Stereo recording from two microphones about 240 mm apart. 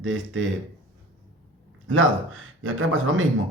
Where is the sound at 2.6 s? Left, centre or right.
Right.